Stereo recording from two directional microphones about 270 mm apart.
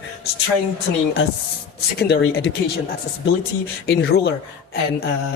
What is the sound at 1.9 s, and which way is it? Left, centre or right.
Speech, left.